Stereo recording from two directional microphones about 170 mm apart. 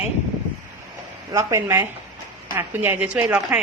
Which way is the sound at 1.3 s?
20° right (ahead or behind).